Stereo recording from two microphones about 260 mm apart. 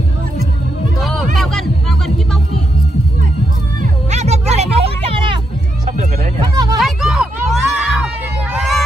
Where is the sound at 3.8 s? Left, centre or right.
Right.